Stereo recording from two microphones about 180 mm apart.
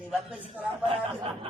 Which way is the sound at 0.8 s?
30° right (ahead or behind).